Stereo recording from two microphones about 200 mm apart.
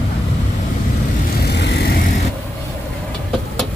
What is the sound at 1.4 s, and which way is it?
Vehicle, 55° left (ahead or behind).